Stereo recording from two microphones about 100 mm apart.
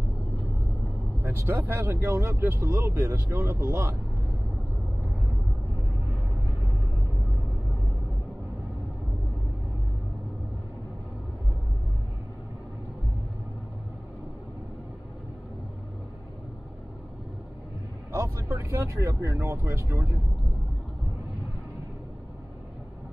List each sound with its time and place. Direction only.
1.2 s speech: 25° right (ahead or behind)
18.1 s vehicle: 30° right (ahead or behind)